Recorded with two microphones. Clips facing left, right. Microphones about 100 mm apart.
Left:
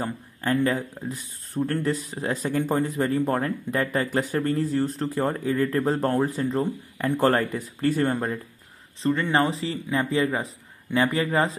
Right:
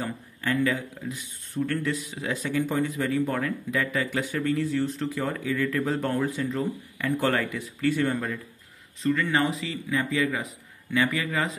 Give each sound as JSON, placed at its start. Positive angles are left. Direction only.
{"t": 0.0, "sound": "speech", "side_deg": 35}